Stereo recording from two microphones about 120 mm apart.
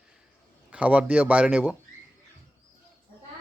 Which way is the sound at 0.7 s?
10° right (ahead or behind).